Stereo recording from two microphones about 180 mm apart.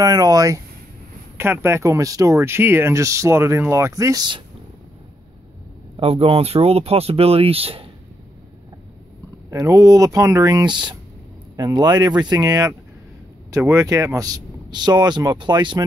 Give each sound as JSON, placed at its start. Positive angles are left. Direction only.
{"t": 0.0, "sound": "speech", "side_deg": -20}
{"t": 5.9, "sound": "speech", "side_deg": -30}
{"t": 9.5, "sound": "speech", "side_deg": -20}